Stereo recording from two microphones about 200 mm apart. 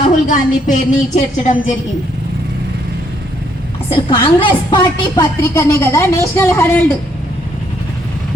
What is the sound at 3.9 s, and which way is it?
A woman's voice, 25° left (ahead or behind).